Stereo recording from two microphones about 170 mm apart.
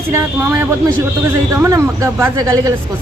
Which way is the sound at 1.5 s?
15° right (ahead or behind).